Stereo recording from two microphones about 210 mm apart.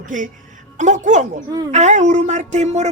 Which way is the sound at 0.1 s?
40° right (ahead or behind).